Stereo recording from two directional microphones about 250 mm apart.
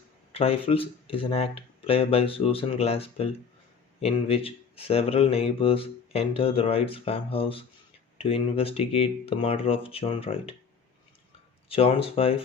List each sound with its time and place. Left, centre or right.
0.3 s speech: left
11.7 s speech: left